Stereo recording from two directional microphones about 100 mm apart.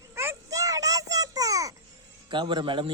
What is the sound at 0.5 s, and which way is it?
Child singing, 35° right (ahead or behind).